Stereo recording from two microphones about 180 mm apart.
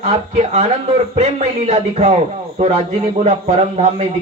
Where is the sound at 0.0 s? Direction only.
35° right (ahead or behind).